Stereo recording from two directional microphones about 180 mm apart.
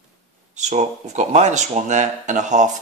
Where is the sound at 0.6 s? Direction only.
40° right (ahead or behind).